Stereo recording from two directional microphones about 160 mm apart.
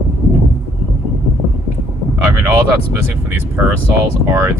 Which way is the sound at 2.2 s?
15° right (ahead or behind).